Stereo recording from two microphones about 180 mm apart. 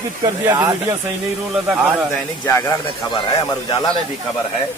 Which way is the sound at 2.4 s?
15° left (ahead or behind).